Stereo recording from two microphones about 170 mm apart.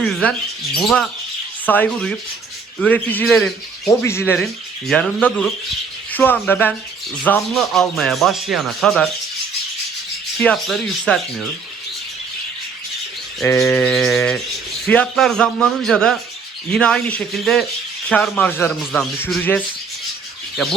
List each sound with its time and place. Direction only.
0.0 s speech: 5° left (ahead or behind)
10.4 s speech: 5° left (ahead or behind)
13.4 s speech: 15° left (ahead or behind)
14.1 s speech: 5° left (ahead or behind)